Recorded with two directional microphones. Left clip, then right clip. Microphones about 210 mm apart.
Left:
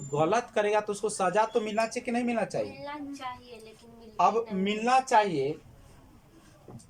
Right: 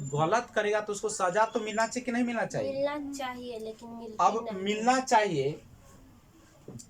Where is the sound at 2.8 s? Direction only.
40° right (ahead or behind).